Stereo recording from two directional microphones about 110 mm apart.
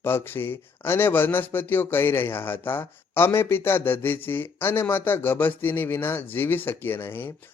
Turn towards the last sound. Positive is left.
turn(degrees=20)  # may be behind; listen again after turning